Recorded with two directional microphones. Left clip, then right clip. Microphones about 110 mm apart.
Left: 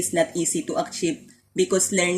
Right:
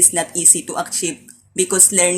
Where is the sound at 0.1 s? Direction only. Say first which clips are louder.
Right 3 dB; 25° left (ahead or behind).